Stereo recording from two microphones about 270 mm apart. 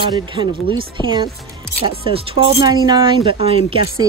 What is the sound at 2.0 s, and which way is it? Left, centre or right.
Speech, right.